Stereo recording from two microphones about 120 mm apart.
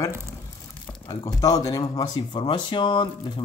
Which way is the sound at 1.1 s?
30° left (ahead or behind).